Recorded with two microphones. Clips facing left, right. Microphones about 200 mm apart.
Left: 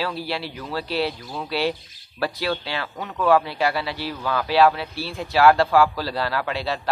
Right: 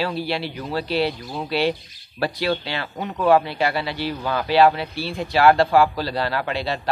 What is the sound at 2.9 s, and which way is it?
Speech, 20° right (ahead or behind).